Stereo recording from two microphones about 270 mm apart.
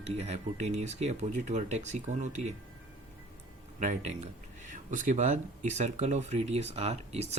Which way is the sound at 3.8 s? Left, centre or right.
Right.